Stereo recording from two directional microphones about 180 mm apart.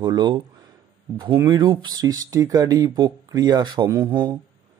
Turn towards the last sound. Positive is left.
turn(degrees=-25)  # may be behind; listen again after turning